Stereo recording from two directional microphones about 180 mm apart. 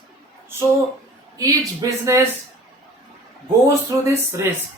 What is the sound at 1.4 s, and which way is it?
Speech, 20° right (ahead or behind).